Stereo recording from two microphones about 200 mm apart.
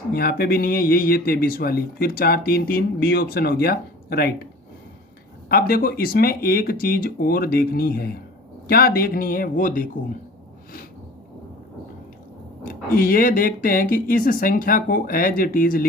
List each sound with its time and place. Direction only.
0.1 s speech: 50° left (ahead or behind)
5.5 s speech: 50° left (ahead or behind)
12.6 s speech: 45° left (ahead or behind)